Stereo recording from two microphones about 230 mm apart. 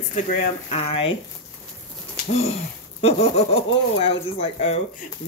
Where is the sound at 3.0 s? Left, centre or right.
Left.